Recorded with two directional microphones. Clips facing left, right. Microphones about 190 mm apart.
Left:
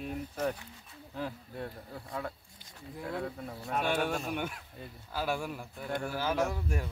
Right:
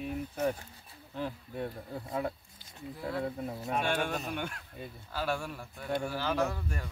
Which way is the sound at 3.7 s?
Centre (ahead or behind).